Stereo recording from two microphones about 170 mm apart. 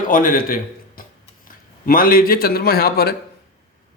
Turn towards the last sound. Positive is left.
turn(degrees=65)  # may be behind; listen again after turning